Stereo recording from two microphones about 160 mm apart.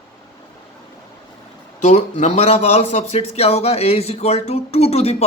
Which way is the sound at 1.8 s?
45° left (ahead or behind).